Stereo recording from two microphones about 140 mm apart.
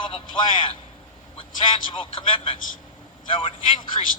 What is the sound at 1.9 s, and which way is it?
Speech, 40° left (ahead or behind).